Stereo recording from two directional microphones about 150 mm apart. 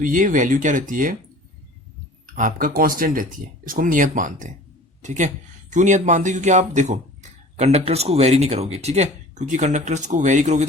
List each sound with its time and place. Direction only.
0.0 s speech: 65° right (ahead or behind)
2.2 s speech: 60° right (ahead or behind)